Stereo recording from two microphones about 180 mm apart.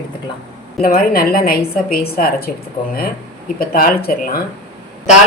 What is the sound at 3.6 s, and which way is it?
Speech, 55° left (ahead or behind).